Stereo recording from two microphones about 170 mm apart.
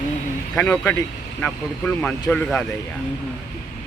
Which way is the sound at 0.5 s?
5° left (ahead or behind).